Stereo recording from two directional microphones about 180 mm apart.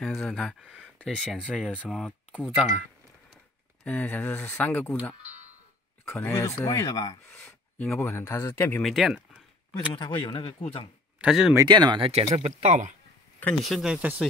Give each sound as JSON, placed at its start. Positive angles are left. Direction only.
{"t": 0.0, "sound": "speech", "side_deg": 0}
{"t": 3.8, "sound": "speech", "side_deg": 10}
{"t": 6.0, "sound": "speech", "side_deg": 15}
{"t": 7.3, "sound": "a sound", "side_deg": 5}
{"t": 7.9, "sound": "speech", "side_deg": 15}
{"t": 8.8, "sound": "speech", "side_deg": 0}
{"t": 9.9, "sound": "speech", "side_deg": 25}
{"t": 11.1, "sound": "speech", "side_deg": -5}
{"t": 11.5, "sound": "speech", "side_deg": -25}
{"t": 13.4, "sound": "speech", "side_deg": 5}